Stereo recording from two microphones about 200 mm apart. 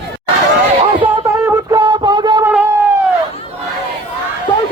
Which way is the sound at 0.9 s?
15° right (ahead or behind).